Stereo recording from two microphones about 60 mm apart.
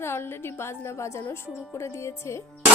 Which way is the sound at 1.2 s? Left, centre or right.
Left.